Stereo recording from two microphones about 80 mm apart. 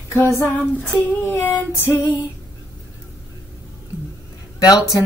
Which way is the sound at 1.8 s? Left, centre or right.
Left.